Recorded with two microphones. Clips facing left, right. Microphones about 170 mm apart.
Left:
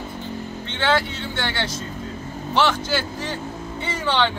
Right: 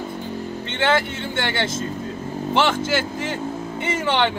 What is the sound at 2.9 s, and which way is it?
Speech, 20° right (ahead or behind).